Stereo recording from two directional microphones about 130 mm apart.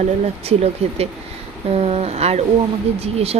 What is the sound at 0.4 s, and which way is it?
Speech, 50° right (ahead or behind).